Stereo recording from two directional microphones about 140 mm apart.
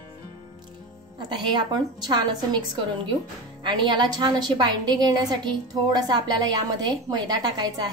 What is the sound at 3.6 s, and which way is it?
A woman's voice, 35° right (ahead or behind).